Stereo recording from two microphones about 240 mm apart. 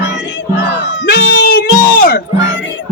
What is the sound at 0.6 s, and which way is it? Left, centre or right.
Crowd, left.